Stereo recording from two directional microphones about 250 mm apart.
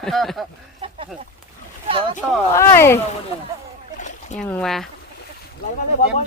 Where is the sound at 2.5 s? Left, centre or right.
Centre.